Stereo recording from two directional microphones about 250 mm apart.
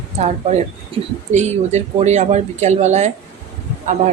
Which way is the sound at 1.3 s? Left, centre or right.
Right.